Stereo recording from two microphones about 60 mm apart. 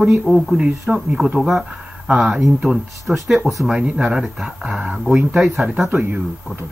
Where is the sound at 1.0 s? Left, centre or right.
Centre.